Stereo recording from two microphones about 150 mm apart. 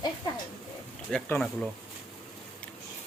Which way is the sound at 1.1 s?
5° left (ahead or behind).